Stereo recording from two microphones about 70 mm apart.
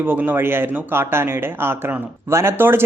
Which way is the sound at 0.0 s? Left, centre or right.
Right.